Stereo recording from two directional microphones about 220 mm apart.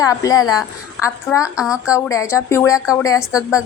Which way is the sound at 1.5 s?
5° right (ahead or behind).